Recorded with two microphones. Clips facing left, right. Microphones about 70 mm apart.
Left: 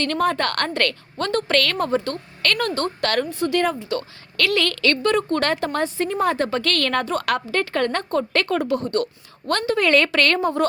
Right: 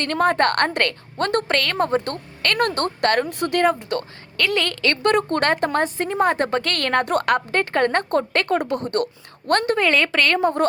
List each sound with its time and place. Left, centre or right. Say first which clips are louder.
0.0 s speech: right 3 dB; right
1.2 s speech: right 2 dB; right
1.5 s a woman's voice: even; right
2.6 s speech: right 5 dB; right
3.0 s speech: right 4 dB; right
3.2 s a woman's voice: left 1 dB; right
3.5 s speech: right 3 dB; right
4.4 s a woman's voice: left 1 dB; right
5.0 s a woman's voice: right 4 dB; right
7.0 s a woman's voice: right 3 dB; right
7.3 s a woman's voice: right 2 dB; right
8.5 s speech: even; right
9.7 s a woman's voice: left 1 dB; centre
10.4 s speech: right 1 dB; right